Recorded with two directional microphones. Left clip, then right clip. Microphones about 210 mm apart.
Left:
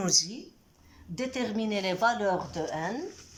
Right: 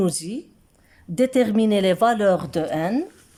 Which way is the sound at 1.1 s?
40° right (ahead or behind).